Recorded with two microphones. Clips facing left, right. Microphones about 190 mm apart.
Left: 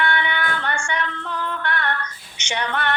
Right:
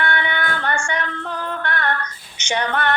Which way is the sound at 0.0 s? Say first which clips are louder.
Even; 40° right (ahead or behind).